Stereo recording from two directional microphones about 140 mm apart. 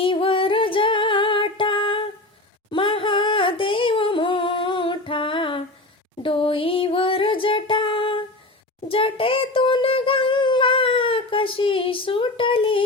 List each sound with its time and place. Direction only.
0.0 s music: 40° left (ahead or behind)
2.6 s humming: 35° left (ahead or behind)
6.2 s music: 40° left (ahead or behind)
8.9 s a sound: 40° left (ahead or behind)